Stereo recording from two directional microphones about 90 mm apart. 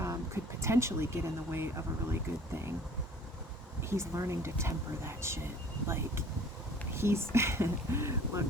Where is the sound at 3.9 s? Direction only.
30° right (ahead or behind).